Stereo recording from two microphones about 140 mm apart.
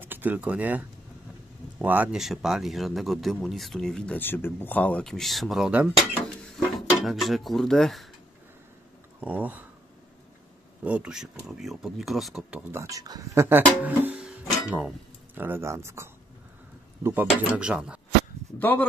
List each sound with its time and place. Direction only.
0.0 s speech: 15° right (ahead or behind)
7.1 s speech: centre (ahead or behind)
9.2 s speech: 10° right (ahead or behind)
10.8 s speech: 10° right (ahead or behind)
12.8 s speech: 25° right (ahead or behind); by 18.0 s 5° right (ahead or behind)
18.6 s speech: 15° left (ahead or behind)